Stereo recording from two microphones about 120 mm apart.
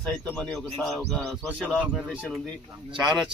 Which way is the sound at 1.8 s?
10° right (ahead or behind).